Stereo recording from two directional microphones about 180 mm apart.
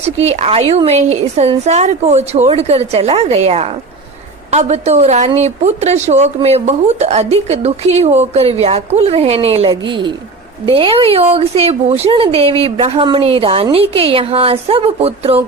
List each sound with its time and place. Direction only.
0.0 s a woman's voice: 35° right (ahead or behind)